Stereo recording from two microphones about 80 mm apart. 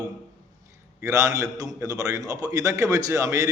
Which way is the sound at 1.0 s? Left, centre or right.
Right.